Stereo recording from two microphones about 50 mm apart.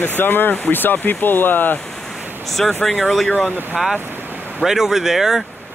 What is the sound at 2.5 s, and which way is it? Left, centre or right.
Speech, centre.